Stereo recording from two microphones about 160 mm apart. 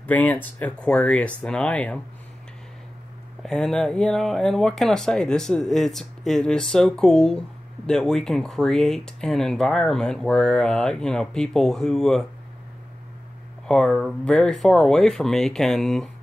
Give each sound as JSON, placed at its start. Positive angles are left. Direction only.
{"t": 0.0, "sound": "speech", "side_deg": 10}
{"t": 3.4, "sound": "speech", "side_deg": 0}
{"t": 13.7, "sound": "speech", "side_deg": 5}